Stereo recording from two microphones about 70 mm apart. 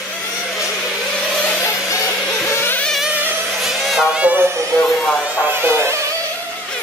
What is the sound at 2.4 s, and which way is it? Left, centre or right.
Vehicle, left.